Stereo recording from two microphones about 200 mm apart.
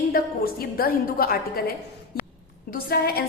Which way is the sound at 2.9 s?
50° left (ahead or behind).